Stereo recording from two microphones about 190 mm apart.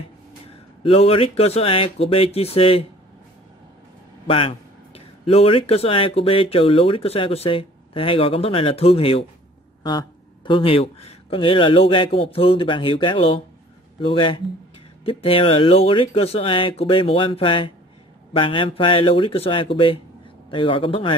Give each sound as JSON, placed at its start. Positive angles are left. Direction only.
{"t": 0.8, "sound": "speech", "side_deg": 30}
{"t": 4.3, "sound": "speech", "side_deg": 30}